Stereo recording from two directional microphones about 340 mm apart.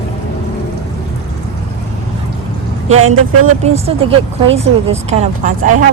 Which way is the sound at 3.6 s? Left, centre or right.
Centre.